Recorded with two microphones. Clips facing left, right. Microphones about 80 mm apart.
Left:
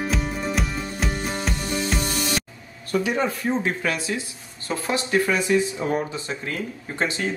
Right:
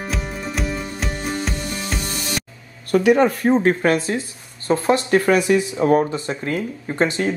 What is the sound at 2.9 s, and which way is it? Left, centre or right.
Speech, right.